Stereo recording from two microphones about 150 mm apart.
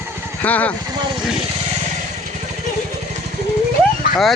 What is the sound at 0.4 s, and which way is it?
Speech, 10° left (ahead or behind).